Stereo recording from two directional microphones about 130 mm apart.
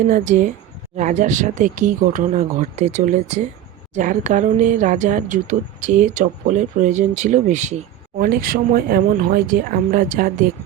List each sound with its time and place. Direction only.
0.1 s speech: 80° right
3.9 s speech: 80° right; by 7.8 s 65° right (ahead or behind)
8.2 s speech: 90° right